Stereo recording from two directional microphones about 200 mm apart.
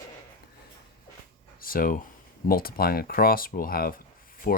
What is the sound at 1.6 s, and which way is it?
Speech, 45° left (ahead or behind).